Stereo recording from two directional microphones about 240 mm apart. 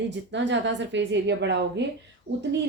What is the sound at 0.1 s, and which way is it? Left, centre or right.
A woman's voice, right.